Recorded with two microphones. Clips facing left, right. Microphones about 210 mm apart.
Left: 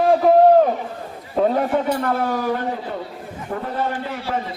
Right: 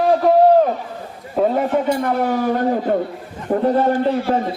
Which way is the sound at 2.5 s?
45° right (ahead or behind).